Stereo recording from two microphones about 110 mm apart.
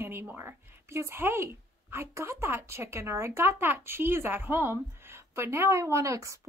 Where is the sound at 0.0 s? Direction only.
20° right (ahead or behind).